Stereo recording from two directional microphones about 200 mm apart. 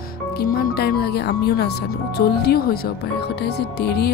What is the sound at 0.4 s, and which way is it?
Speech, 45° left (ahead or behind).